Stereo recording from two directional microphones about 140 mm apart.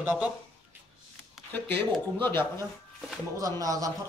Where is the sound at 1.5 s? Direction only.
15° left (ahead or behind).